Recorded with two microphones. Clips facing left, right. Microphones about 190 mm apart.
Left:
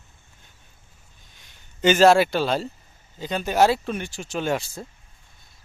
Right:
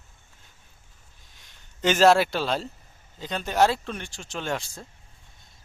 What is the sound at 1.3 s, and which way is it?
Speech, centre (ahead or behind).